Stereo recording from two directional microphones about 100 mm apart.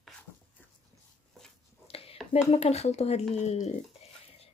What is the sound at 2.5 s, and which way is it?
Speech, 90° left.